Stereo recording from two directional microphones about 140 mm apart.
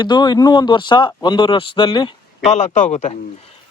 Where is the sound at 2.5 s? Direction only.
55° left (ahead or behind).